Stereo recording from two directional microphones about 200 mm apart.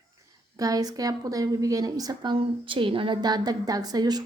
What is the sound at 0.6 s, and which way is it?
A woman's voice, 15° right (ahead or behind).